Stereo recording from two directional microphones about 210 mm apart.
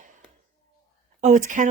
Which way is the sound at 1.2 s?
35° right (ahead or behind).